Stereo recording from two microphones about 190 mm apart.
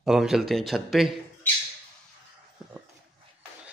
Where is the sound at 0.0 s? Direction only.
5° right (ahead or behind).